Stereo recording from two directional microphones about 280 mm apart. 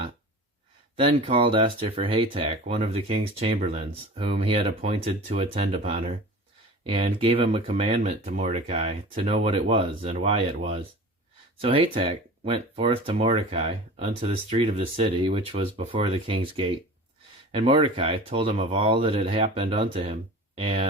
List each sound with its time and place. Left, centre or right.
0.9 s speech: centre